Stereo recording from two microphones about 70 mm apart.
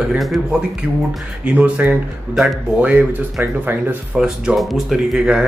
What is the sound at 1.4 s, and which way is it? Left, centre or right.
Speech, right.